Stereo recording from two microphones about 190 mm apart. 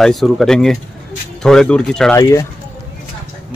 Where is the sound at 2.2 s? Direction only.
15° left (ahead or behind).